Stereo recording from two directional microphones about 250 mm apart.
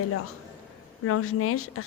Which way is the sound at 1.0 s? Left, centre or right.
Left.